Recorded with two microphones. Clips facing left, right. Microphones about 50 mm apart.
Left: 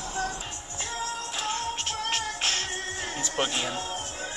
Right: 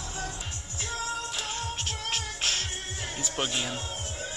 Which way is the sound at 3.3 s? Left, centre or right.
Left.